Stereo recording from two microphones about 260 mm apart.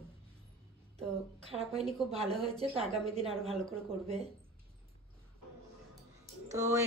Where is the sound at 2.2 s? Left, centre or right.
Centre.